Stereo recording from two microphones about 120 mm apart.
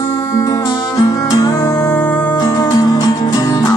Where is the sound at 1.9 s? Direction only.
10° left (ahead or behind).